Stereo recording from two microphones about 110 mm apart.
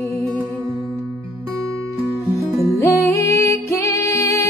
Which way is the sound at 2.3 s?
25° left (ahead or behind).